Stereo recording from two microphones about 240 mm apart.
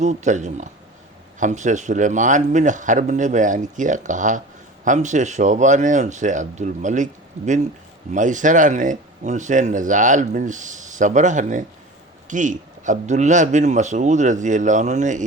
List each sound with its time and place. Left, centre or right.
0.0 s speech: right